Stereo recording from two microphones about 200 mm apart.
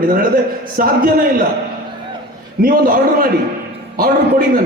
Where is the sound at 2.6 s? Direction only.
45° right (ahead or behind).